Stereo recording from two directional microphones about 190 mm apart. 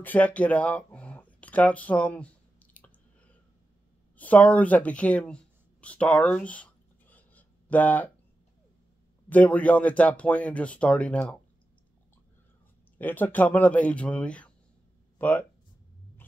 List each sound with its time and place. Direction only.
0.0 s a sound: 10° left (ahead or behind)
4.2 s speech: 10° left (ahead or behind)
9.3 s speech: 10° left (ahead or behind)
12.9 s speech: 10° left (ahead or behind)